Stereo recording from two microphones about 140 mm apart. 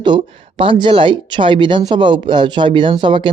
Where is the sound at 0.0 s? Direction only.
35° right (ahead or behind).